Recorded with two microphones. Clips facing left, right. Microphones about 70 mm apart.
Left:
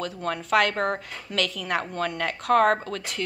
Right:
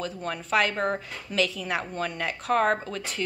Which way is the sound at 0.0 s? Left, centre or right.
Left.